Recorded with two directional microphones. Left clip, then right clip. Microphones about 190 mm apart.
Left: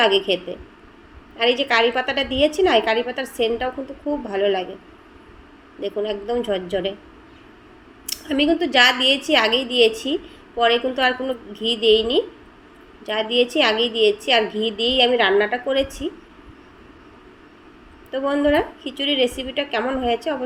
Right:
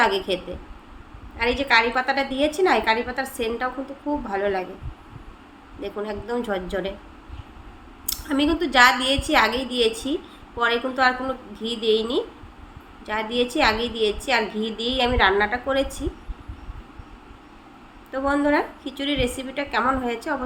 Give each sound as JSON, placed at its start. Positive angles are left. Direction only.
{"t": 0.0, "sound": "a woman's voice", "side_deg": 5}
{"t": 1.4, "sound": "a woman's voice", "side_deg": 5}
{"t": 4.3, "sound": "speech", "side_deg": 5}
{"t": 5.8, "sound": "a woman's voice", "side_deg": 5}
{"t": 8.0, "sound": "a woman's voice", "side_deg": 5}
{"t": 18.1, "sound": "a woman's voice", "side_deg": 5}